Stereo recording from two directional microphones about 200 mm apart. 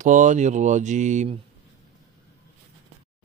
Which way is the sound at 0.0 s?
40° right (ahead or behind).